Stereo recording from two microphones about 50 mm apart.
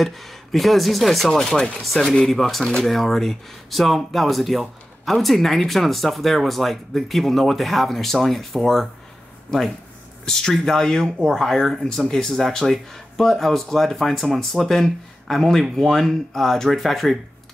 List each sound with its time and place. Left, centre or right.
0.0 s speech: centre
10.2 s speech: centre